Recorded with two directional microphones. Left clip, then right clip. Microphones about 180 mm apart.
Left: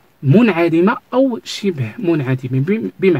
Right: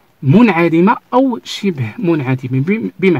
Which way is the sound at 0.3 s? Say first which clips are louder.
Right 2 dB; 30° right (ahead or behind).